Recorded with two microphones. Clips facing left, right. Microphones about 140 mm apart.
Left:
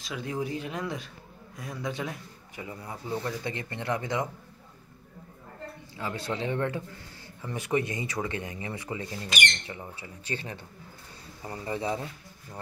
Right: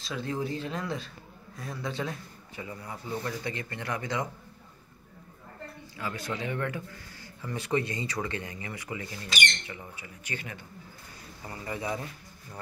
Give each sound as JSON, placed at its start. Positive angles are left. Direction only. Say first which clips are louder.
{"t": 0.0, "sound": "a man's voice", "louder": "even", "side_deg": 15}
{"t": 5.9, "sound": "a man's voice", "louder": "left 2 dB", "side_deg": 25}